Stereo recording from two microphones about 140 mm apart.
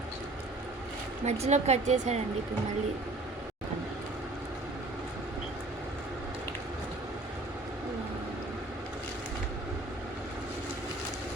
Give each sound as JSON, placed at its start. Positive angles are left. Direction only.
{"t": 1.2, "sound": "a woman's voice", "side_deg": -50}